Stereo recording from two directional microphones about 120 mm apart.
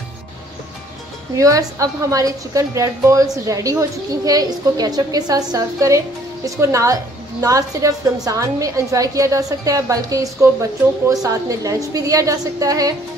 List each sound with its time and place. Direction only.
1.3 s a woman's voice: 25° right (ahead or behind)